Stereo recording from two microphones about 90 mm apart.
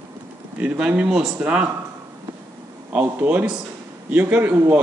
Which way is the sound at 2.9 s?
15° right (ahead or behind).